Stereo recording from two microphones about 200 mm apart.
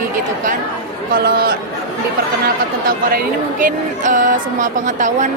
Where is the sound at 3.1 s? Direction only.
40° right (ahead or behind).